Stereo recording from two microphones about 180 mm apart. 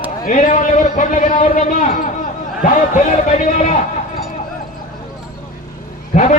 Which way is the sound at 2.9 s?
45° left (ahead or behind).